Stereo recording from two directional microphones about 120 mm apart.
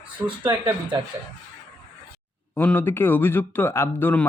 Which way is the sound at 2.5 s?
15° left (ahead or behind).